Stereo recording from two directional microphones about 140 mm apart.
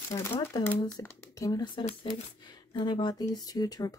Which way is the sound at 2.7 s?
35° left (ahead or behind).